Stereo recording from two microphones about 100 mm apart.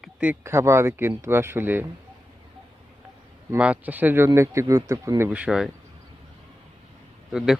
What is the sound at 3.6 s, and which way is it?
Speech, 15° right (ahead or behind).